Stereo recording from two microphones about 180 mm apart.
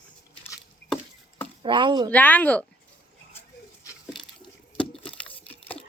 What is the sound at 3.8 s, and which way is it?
Patter, 25° left (ahead or behind).